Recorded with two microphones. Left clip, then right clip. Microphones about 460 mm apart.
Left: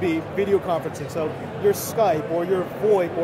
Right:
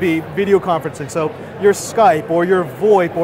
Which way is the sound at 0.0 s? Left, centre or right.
Right.